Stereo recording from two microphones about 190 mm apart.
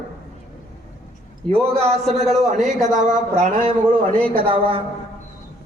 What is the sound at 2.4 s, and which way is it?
Speech, 40° right (ahead or behind).